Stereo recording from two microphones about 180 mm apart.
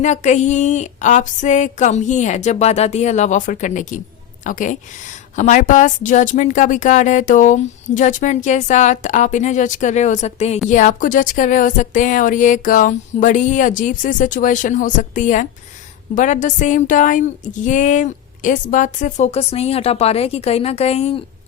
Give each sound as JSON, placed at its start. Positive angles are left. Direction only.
{"t": 0.0, "sound": "a woman's voice", "side_deg": 40}